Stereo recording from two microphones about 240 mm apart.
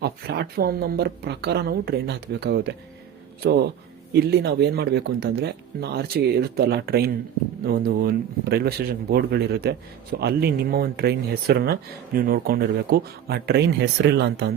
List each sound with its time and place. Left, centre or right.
0.0 s speech: right